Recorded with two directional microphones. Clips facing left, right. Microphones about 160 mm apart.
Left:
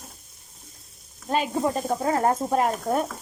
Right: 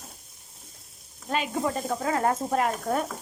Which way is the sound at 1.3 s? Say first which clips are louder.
Left 3 dB; 30° left (ahead or behind).